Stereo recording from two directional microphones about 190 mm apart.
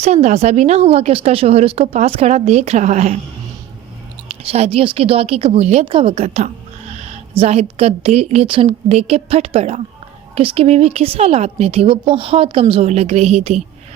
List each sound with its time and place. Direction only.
0.0 s a woman's voice: 35° right (ahead or behind)
4.3 s a woman's voice: 35° right (ahead or behind)